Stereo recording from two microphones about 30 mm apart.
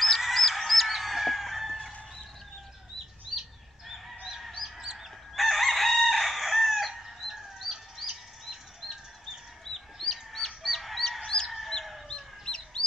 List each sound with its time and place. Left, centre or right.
0.0 s chicken: centre
3.3 s chicken: centre
3.9 s fowl: centre
4.7 s fowl: centre
5.3 s chicken: centre
10.3 s chicken: centre
12.1 s chicken: left